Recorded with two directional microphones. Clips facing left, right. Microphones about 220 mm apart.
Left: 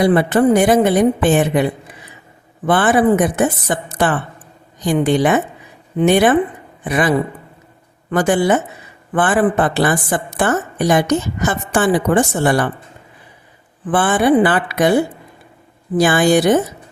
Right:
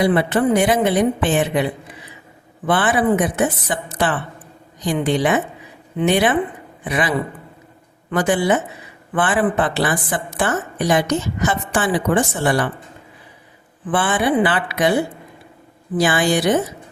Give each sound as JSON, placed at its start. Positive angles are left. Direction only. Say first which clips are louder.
{"t": 0.0, "sound": "a woman's voice", "louder": "left 4 dB", "side_deg": 45}
{"t": 2.6, "sound": "a woman's voice", "louder": "left 4 dB", "side_deg": 45}
{"t": 8.1, "sound": "a woman's voice", "louder": "left 3 dB", "side_deg": 45}
{"t": 13.9, "sound": "a woman's voice", "louder": "left 5 dB", "side_deg": 50}
{"t": 16.0, "sound": "a woman's voice", "louder": "left 5 dB", "side_deg": 45}